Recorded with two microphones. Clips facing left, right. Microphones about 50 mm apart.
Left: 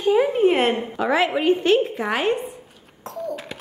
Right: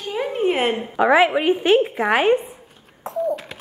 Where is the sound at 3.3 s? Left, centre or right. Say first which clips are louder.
Right 2 dB; centre.